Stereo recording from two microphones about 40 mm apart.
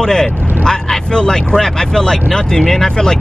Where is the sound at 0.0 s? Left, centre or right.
Centre.